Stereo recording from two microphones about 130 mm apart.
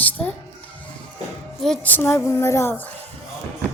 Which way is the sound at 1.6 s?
10° left (ahead or behind).